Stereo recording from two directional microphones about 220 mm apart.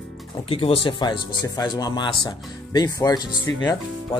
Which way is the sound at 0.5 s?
25° left (ahead or behind).